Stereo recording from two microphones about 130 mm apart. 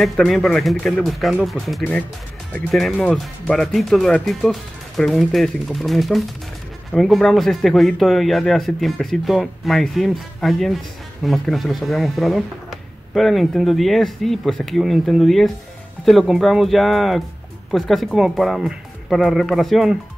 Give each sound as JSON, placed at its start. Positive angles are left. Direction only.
{"t": 0.0, "sound": "speech", "side_deg": 0}